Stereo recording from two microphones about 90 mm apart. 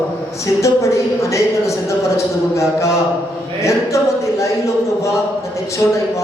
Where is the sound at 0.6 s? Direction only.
35° left (ahead or behind).